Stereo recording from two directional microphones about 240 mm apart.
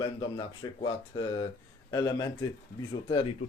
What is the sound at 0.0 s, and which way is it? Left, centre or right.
Speech, centre.